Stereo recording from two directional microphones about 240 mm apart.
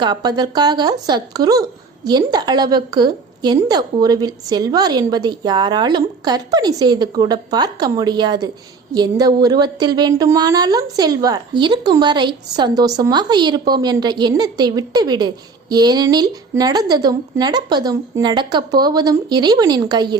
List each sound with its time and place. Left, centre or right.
0.0 s a woman's voice: centre